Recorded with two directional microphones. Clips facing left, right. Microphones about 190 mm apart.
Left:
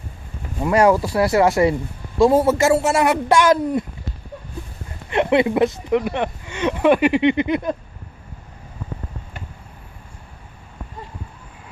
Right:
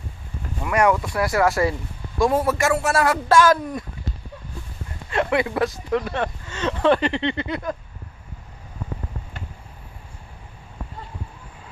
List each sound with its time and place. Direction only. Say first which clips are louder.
0.6 s a man's voice: left 4 dB; 30° left (ahead or behind)
5.0 s speech: left 5 dB; 20° left (ahead or behind)